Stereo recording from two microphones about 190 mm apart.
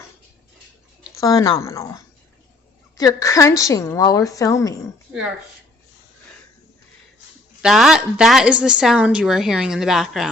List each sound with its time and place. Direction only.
1.1 s a woman's voice: 20° left (ahead or behind)
7.6 s a woman's voice: centre (ahead or behind)